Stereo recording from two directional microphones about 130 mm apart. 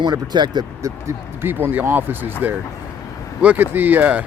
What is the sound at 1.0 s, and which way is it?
Speech, 15° right (ahead or behind).